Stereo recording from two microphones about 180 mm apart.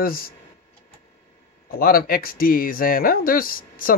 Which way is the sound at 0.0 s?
55° left (ahead or behind).